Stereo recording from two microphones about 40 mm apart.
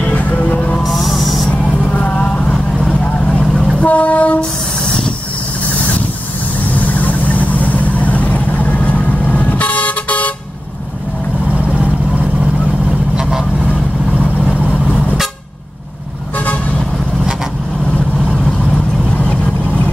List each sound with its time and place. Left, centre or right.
0.0 s music: left
0.8 s music: centre
1.5 s vehicle: left
2.9 s vehicle: left
3.4 s train: centre
3.8 s train: left
6.7 s vehicle: left
13.1 s goose: centre